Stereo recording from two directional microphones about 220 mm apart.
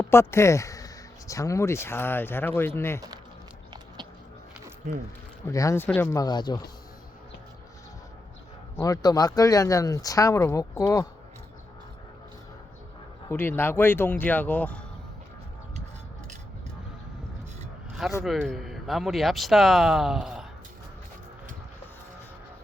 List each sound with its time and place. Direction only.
0.0 s speech: 10° left (ahead or behind)
5.5 s speech: 15° left (ahead or behind)
8.8 s speech: 15° left (ahead or behind)
13.2 s speech: 10° left (ahead or behind)
18.2 s speech: centre (ahead or behind)